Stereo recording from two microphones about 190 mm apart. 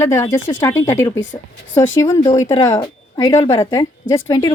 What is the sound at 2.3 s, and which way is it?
A woman's voice, 15° left (ahead or behind).